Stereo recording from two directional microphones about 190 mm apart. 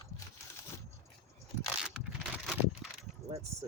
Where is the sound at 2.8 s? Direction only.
Centre (ahead or behind).